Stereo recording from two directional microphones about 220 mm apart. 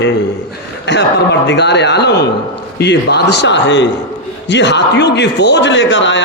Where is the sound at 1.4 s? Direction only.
50° left (ahead or behind).